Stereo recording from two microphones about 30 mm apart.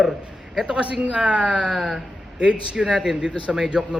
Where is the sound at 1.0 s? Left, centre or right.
Right.